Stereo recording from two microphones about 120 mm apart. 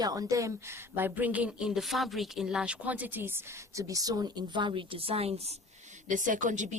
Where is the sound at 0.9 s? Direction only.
15° right (ahead or behind); by 5.5 s 55° right (ahead or behind).